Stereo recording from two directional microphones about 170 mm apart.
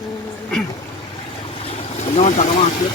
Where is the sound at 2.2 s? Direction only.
45° left (ahead or behind).